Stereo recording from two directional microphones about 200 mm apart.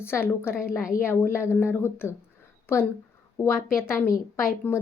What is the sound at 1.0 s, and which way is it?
A woman's voice, 10° left (ahead or behind).